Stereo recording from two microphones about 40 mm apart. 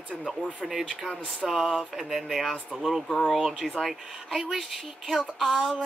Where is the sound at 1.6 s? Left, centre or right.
Centre.